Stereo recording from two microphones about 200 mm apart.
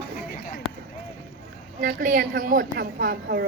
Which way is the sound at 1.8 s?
45° right (ahead or behind).